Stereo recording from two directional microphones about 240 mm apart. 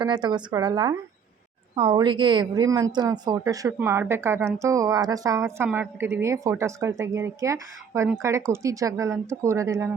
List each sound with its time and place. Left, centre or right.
0.0 s a woman's voice: centre